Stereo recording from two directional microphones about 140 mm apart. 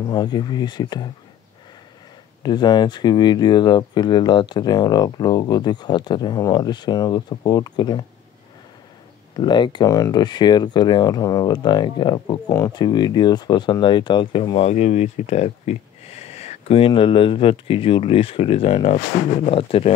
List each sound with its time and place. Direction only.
0.1 s speech: 30° left (ahead or behind)
2.4 s speech: 30° left (ahead or behind)
9.4 s speech: 30° left (ahead or behind)